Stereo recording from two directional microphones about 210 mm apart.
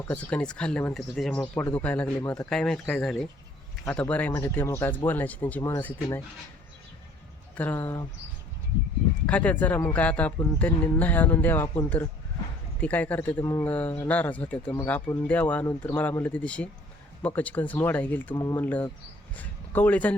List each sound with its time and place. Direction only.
0.1 s speech: 5° left (ahead or behind)
7.5 s speech: 10° left (ahead or behind)
9.2 s speech: 5° left (ahead or behind)